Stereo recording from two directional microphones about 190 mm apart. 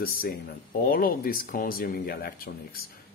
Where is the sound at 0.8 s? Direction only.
50° left (ahead or behind).